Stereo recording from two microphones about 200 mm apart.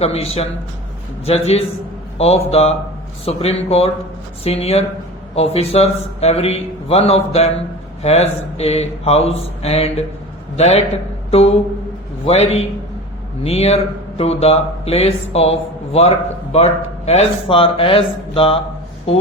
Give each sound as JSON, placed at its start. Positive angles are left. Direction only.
{"t": 0.0, "sound": "a man's voice", "side_deg": 30}